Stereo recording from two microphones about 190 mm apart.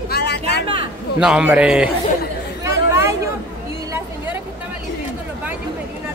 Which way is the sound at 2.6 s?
15° right (ahead or behind).